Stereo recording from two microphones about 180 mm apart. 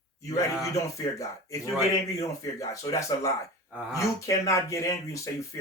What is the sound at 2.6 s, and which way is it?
Speech, 20° left (ahead or behind).